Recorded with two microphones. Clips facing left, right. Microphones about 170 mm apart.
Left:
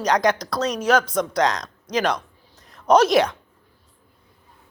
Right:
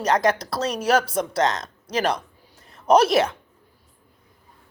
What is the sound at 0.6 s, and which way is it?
Speech, 5° right (ahead or behind).